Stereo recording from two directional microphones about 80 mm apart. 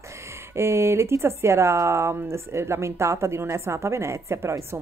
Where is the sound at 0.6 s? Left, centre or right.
Right.